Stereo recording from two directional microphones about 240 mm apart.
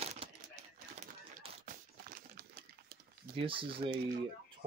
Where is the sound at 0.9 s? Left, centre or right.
Right.